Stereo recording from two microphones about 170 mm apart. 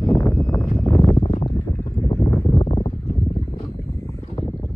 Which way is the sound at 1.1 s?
40° left (ahead or behind).